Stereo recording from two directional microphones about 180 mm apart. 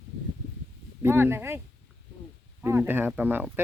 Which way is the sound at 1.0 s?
10° right (ahead or behind).